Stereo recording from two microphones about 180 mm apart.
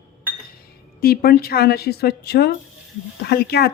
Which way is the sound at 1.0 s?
55° left (ahead or behind).